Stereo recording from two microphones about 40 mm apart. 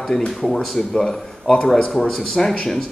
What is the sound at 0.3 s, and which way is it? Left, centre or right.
Speech, centre.